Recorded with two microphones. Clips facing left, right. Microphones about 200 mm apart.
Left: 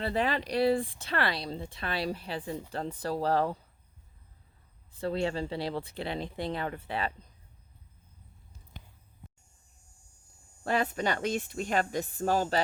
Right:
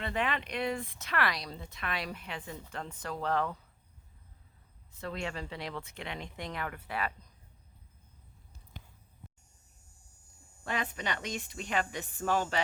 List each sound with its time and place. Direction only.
0.0 s speech: 35° left (ahead or behind)
4.9 s speech: 30° left (ahead or behind)
10.6 s speech: 40° left (ahead or behind)